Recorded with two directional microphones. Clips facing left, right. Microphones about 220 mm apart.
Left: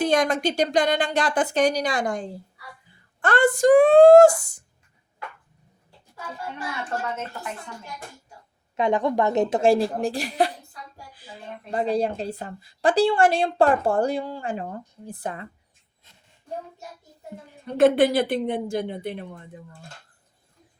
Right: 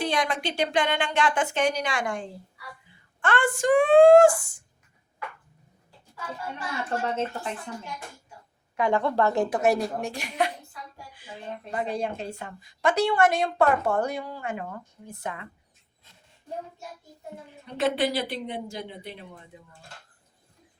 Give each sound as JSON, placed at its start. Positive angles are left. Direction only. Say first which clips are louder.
{"t": 0.0, "sound": "a woman's voice", "louder": "left 6 dB", "side_deg": 45}
{"t": 8.7, "sound": "a woman's voice", "louder": "left 2 dB", "side_deg": 20}
{"t": 11.7, "sound": "a woman's voice", "louder": "left 6 dB", "side_deg": 35}
{"t": 17.7, "sound": "speech", "louder": "left 8 dB", "side_deg": 50}